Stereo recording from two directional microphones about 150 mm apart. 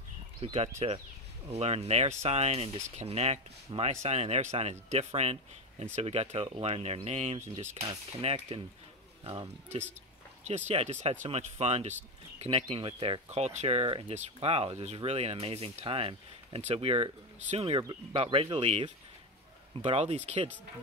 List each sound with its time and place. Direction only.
0.4 s speech: 45° right (ahead or behind)